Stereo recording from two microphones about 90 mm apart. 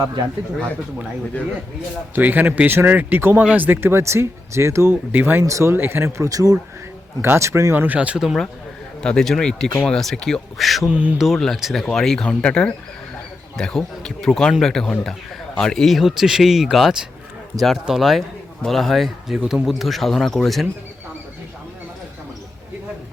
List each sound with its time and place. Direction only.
2.1 s speech: 20° right (ahead or behind); by 6.6 s 40° right (ahead or behind)
7.2 s speech: 30° right (ahead or behind); by 8.4 s 5° right (ahead or behind)
9.0 s speech: 10° left (ahead or behind)